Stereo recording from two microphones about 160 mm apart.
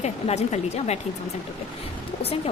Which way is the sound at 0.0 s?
45° left (ahead or behind).